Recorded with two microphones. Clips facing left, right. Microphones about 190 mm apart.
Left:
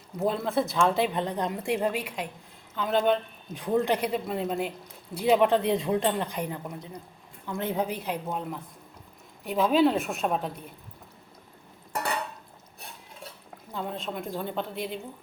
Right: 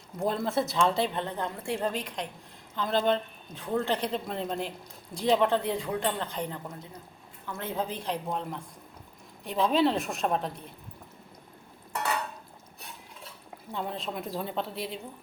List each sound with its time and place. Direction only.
0.2 s a woman's voice: centre (ahead or behind)
1.1 s a man's voice: 15° left (ahead or behind)
3.5 s a man's voice: 15° left (ahead or behind)
13.7 s a woman's voice: centre (ahead or behind)